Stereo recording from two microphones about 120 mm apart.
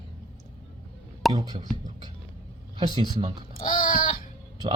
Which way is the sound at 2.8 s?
35° right (ahead or behind).